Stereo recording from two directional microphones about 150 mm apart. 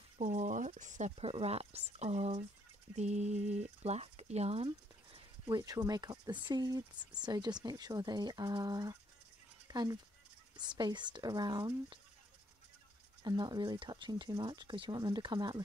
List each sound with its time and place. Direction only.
0.2 s speech: 50° right (ahead or behind)
4.6 s speech: 30° right (ahead or behind)
9.7 s a sound: 25° right (ahead or behind)
10.8 s speech: 30° right (ahead or behind)
13.2 s speech: 25° right (ahead or behind)